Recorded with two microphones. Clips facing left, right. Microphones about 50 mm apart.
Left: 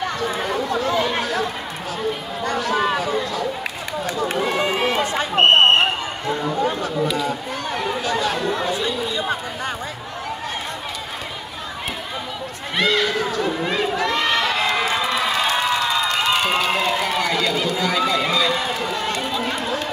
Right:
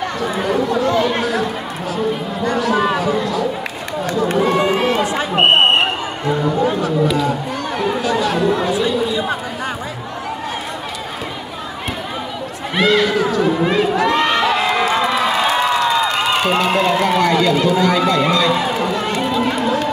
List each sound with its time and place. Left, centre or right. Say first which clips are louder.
0.8 s chatter: right 4 dB; centre
4.0 s run: right 6 dB; centre
5.3 s a sound: right 1 dB; centre
8.0 s chatter: right 5 dB; centre
12.7 s run: right 5 dB; centre
13.9 s crowd: right 5 dB; centre
18.5 s run: right 5 dB; centre